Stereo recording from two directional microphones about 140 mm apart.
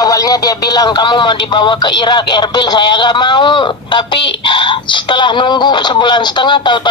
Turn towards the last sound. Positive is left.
turn(degrees=35)  # may be behind; listen again after turning